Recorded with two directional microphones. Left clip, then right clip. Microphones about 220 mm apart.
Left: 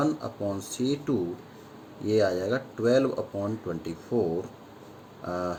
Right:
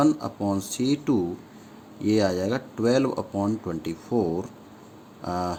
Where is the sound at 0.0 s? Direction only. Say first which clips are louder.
Right 5 dB; 40° right (ahead or behind).